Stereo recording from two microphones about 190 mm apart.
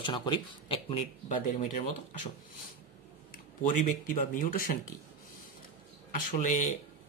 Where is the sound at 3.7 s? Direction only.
45° left (ahead or behind).